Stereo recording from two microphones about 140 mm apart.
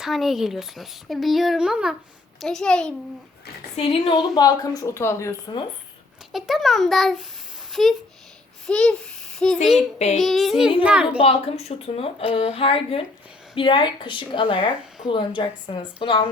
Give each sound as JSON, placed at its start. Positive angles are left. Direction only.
{"t": 0.0, "sound": "speech", "side_deg": 0}
{"t": 3.8, "sound": "a woman's voice", "side_deg": 45}
{"t": 6.3, "sound": "a child's voice", "side_deg": 0}
{"t": 11.2, "sound": "a woman's voice", "side_deg": 45}